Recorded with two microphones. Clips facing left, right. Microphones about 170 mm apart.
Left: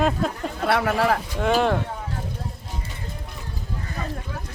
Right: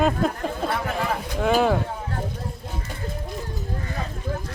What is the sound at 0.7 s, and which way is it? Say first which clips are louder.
Speech: left 8 dB; 75° left (ahead or behind).